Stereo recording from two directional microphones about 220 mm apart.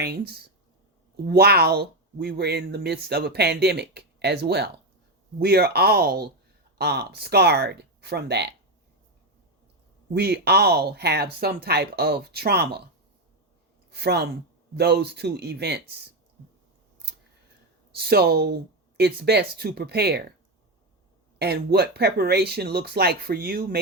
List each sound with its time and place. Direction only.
0.0 s speech: 45° right (ahead or behind)
10.2 s speech: 45° right (ahead or behind)
13.9 s speech: 50° right (ahead or behind)
17.9 s speech: 45° right (ahead or behind)
21.3 s speech: 45° right (ahead or behind)